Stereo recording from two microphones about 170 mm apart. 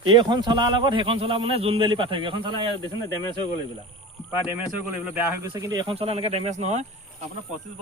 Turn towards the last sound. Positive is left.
turn(degrees=-40)  # may be behind; listen again after turning